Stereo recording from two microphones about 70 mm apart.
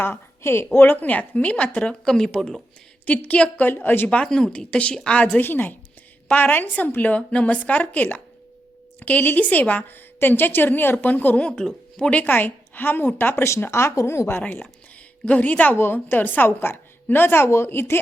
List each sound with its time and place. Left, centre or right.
0.0 s a woman's voice: left; by 2.3 s centre
3.1 s a woman's voice: left
4.2 s speech: centre
5.4 s a woman's voice: left
11.3 s a woman's voice: centre; by 13.4 s left
13.4 s speech: left
15.2 s a woman's voice: left